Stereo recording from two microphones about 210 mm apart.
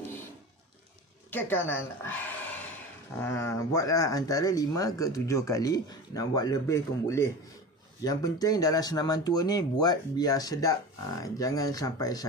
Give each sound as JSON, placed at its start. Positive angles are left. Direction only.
{"t": 1.3, "sound": "speech", "side_deg": 10}